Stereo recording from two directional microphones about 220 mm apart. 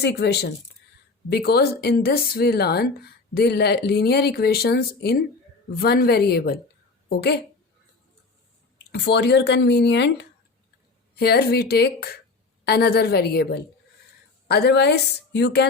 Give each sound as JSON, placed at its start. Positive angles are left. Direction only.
{"t": 0.0, "sound": "speech", "side_deg": 50}
{"t": 8.9, "sound": "speech", "side_deg": 50}